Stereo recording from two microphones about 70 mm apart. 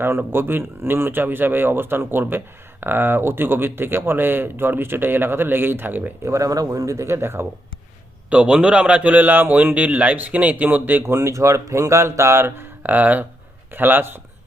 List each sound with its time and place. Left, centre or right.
0.0 s speech: right
6.3 s speech: right
8.3 s a man's voice: centre
11.0 s speech: right